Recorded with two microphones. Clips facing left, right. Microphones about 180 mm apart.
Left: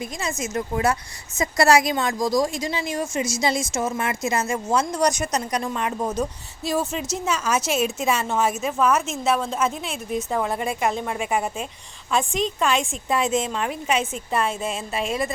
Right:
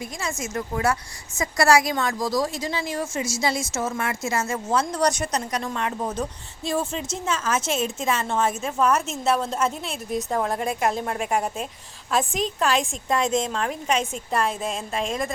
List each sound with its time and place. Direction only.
0.2 s a woman's voice: 20° left (ahead or behind)